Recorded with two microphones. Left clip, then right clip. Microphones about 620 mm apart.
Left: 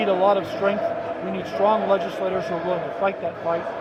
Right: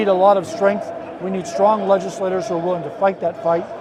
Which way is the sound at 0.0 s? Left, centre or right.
Right.